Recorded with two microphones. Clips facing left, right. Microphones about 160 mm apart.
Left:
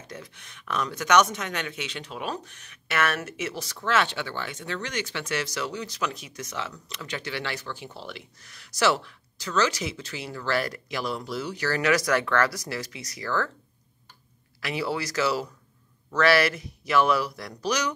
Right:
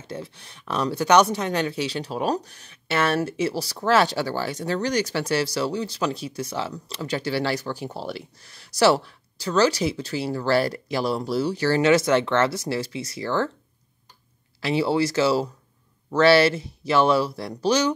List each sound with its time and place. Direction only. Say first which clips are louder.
0.0 s speech: right 7 dB; 30° right (ahead or behind)
14.6 s speech: right 8 dB; 30° right (ahead or behind)